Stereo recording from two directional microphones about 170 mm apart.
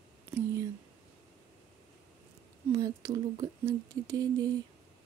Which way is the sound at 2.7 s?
20° right (ahead or behind).